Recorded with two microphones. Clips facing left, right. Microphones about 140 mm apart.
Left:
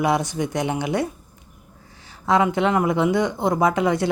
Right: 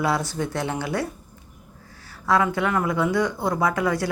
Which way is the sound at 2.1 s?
20° left (ahead or behind).